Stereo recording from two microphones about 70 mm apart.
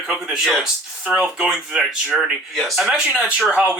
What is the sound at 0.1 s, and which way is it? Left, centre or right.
Speech, centre.